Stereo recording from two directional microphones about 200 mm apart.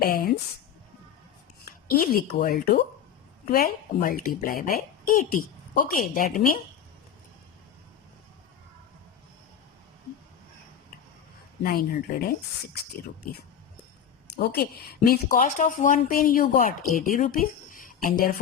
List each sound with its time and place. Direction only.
0.0 s speech: 45° left (ahead or behind)
1.9 s speech: 50° left (ahead or behind)
11.6 s speech: 45° left (ahead or behind)
14.3 s speech: 50° left (ahead or behind)